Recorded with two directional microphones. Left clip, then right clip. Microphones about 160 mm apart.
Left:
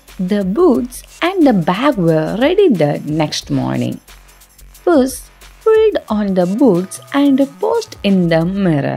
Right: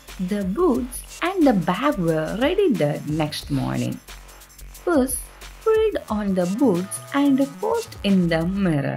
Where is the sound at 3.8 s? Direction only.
Centre (ahead or behind).